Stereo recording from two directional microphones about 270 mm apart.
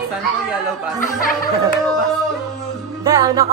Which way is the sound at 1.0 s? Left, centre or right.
Left.